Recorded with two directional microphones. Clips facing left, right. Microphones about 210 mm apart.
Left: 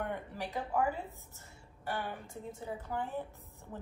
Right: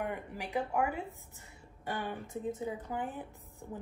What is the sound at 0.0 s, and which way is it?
A woman's voice, 10° right (ahead or behind).